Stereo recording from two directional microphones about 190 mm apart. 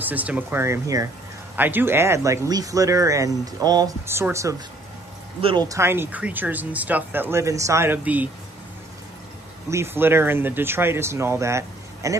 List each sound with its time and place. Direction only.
0.0 s speech: 10° right (ahead or behind)
5.7 s speech: 15° right (ahead or behind)
9.7 s speech: 15° right (ahead or behind)